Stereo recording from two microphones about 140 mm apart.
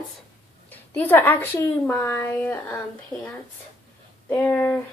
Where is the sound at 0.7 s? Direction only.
15° left (ahead or behind).